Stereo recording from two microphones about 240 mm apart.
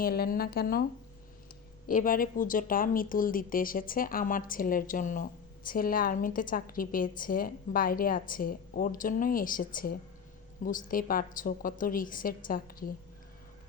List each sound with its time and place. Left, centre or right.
0.0 s a woman's voice: left
1.9 s a woman's voice: left